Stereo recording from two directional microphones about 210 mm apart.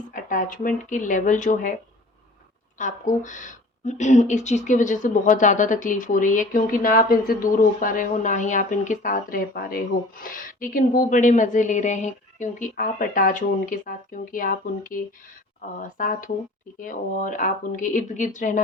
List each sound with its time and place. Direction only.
0.1 s speech: 40° left (ahead or behind)
2.7 s speech: 35° left (ahead or behind)
16.0 s speech: 40° left (ahead or behind)